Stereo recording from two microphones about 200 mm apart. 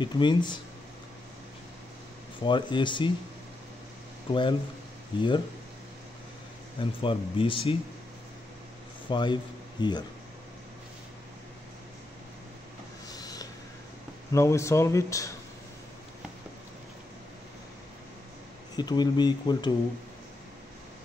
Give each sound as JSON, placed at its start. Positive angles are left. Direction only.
{"t": 0.0, "sound": "speech", "side_deg": 20}
{"t": 2.4, "sound": "speech", "side_deg": 25}
{"t": 4.3, "sound": "speech", "side_deg": 25}
{"t": 6.8, "sound": "speech", "side_deg": 25}
{"t": 9.1, "sound": "speech", "side_deg": 20}
{"t": 13.1, "sound": "a sound", "side_deg": 20}
{"t": 14.3, "sound": "speech", "side_deg": 15}
{"t": 18.8, "sound": "speech", "side_deg": 20}